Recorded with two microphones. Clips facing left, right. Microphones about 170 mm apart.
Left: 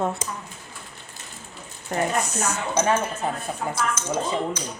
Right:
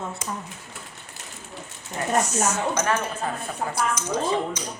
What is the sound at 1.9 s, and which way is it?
Speech, 60° left (ahead or behind).